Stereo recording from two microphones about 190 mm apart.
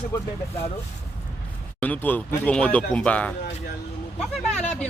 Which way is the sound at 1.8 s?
10° left (ahead or behind).